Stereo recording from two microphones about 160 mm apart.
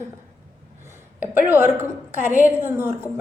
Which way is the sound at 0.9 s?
15° right (ahead or behind).